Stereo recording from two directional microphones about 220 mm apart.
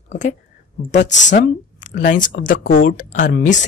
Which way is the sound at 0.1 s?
35° left (ahead or behind).